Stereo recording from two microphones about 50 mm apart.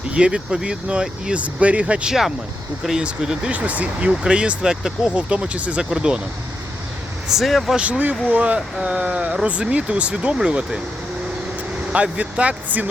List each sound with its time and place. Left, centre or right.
0.1 s speech: centre
2.0 s speech: centre
3.5 s speech: right
7.3 s speech: centre
7.8 s speech: right
12.1 s speech: right